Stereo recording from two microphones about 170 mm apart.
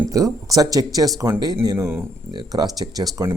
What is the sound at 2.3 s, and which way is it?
Speech, 25° right (ahead or behind).